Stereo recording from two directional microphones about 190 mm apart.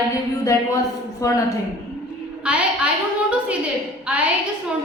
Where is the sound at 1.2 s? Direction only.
15° left (ahead or behind).